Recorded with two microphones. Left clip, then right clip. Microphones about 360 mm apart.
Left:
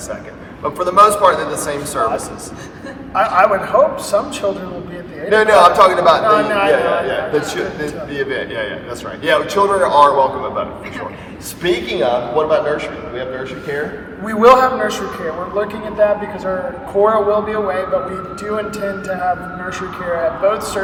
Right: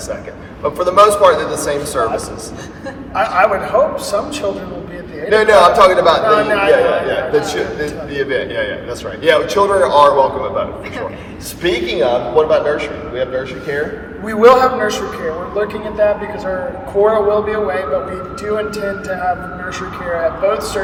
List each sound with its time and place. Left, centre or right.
0.6 s a man's voice: centre
3.2 s a man's voice: centre
20.5 s a man's voice: centre